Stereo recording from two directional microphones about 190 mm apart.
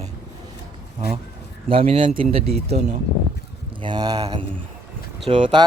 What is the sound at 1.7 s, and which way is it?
Speech, 30° right (ahead or behind).